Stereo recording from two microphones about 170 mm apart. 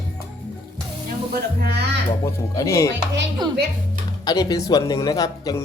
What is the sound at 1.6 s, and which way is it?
Speech, 80° right.